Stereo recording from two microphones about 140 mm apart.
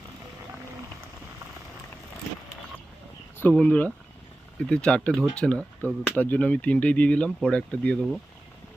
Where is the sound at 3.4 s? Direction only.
10° left (ahead or behind).